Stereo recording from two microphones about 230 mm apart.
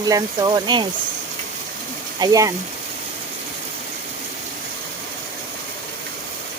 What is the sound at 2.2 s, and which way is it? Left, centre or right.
Speech, centre.